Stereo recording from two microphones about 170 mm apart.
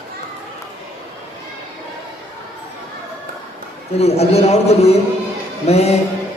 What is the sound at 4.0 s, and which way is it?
A man's voice, 40° left (ahead or behind).